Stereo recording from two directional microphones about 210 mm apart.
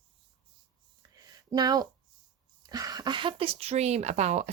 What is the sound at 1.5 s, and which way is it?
Speech, 20° right (ahead or behind).